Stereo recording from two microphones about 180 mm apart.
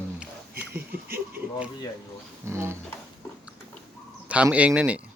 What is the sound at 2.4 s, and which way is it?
Speech, 15° right (ahead or behind).